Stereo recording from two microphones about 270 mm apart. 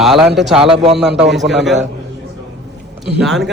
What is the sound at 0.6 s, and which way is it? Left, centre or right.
Speech, centre.